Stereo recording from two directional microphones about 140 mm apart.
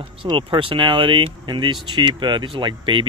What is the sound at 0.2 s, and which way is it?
Speech, 35° right (ahead or behind).